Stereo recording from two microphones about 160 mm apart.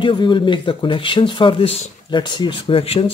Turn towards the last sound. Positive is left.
turn(degrees=35)  # may be behind; listen again after turning